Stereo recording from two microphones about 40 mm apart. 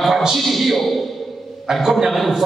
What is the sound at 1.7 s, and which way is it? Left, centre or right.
Speech, centre.